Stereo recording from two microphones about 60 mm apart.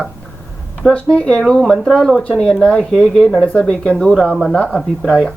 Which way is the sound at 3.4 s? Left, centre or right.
Centre.